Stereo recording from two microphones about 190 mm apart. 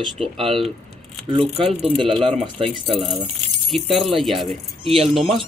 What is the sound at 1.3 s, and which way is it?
Speech, 30° right (ahead or behind).